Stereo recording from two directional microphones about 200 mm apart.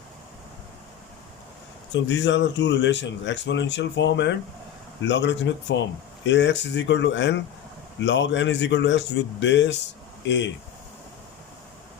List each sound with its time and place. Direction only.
2.0 s a man's voice: 65° left (ahead or behind)